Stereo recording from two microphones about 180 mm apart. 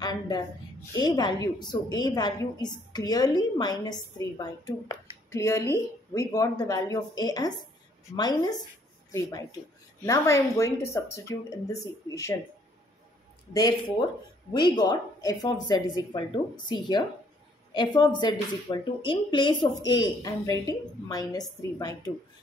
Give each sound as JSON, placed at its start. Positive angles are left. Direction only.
{"t": 0.9, "sound": "a woman's voice", "side_deg": 20}
{"t": 13.5, "sound": "a woman's voice", "side_deg": 20}